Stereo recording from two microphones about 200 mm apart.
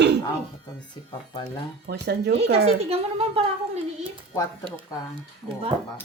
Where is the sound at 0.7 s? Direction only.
20° left (ahead or behind).